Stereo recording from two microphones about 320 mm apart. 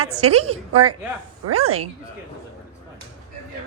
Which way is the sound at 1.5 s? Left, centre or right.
Right.